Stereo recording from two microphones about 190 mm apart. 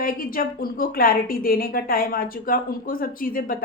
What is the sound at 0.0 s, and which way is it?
A woman's voice, 50° left (ahead or behind).